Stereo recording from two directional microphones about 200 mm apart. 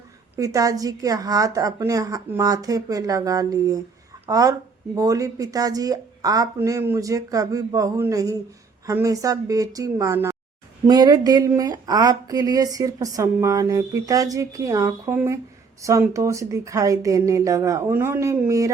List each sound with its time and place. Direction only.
0.3 s speech: 15° right (ahead or behind)